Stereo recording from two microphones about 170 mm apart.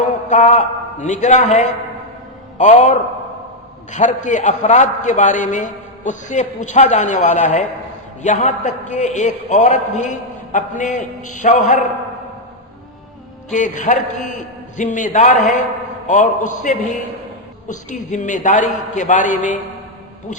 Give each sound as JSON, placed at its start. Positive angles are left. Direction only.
{"t": 0.3, "sound": "a man's voice", "side_deg": 45}
{"t": 13.5, "sound": "a man's voice", "side_deg": 45}